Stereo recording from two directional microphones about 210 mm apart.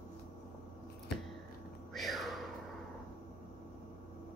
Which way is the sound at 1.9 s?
Centre (ahead or behind).